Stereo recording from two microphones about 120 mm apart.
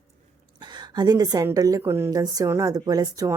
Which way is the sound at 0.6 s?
35° right (ahead or behind).